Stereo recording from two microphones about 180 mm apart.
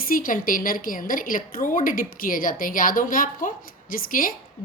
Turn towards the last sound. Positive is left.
turn(degrees=50)  # may be behind; listen again after turning